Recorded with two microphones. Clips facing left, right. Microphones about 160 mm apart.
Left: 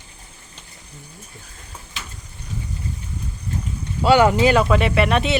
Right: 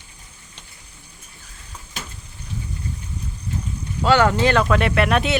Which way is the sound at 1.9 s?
45° right (ahead or behind).